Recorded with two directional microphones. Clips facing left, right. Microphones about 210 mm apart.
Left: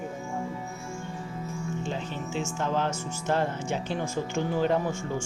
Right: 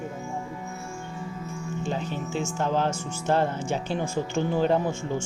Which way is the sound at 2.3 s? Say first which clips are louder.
Right 2 dB; 35° right (ahead or behind).